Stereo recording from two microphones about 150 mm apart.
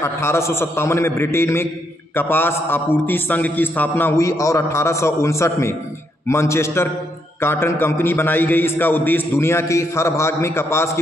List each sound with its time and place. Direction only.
0.0 s a man's voice: 20° left (ahead or behind)